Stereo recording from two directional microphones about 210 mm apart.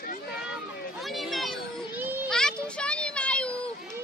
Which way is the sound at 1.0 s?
Centre (ahead or behind).